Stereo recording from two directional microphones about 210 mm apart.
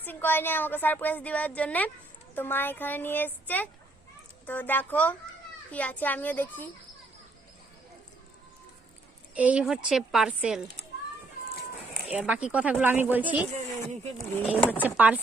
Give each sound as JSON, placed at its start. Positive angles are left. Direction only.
{"t": 0.0, "sound": "a woman's voice", "side_deg": 10}
{"t": 9.3, "sound": "a woman's voice", "side_deg": -5}
{"t": 12.1, "sound": "speech", "side_deg": -5}
{"t": 13.5, "sound": "speech", "side_deg": -30}
{"t": 14.8, "sound": "speech", "side_deg": -5}